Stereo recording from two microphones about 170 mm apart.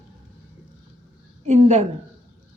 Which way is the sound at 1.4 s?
40° right (ahead or behind).